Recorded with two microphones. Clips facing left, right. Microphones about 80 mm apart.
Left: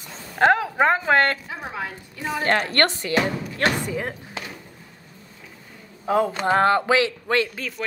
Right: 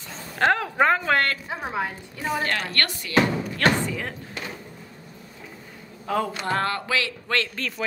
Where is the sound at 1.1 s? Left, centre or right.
Left.